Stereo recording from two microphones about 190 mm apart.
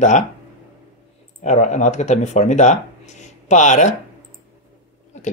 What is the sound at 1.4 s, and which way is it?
Speech, 40° left (ahead or behind).